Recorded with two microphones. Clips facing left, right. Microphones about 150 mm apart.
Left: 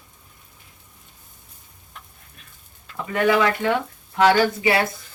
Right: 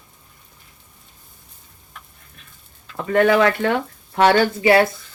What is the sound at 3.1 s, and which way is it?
Speech, 55° right (ahead or behind).